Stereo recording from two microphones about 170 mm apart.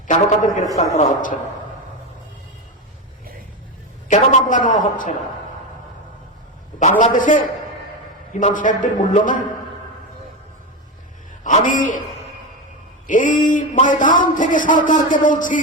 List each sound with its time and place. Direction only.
0.1 s a man's voice: 50° left (ahead or behind)
4.1 s a man's voice: 50° left (ahead or behind)
7.0 s a man's voice: 50° left (ahead or behind)
11.4 s a man's voice: 50° left (ahead or behind)
13.1 s a man's voice: 50° left (ahead or behind)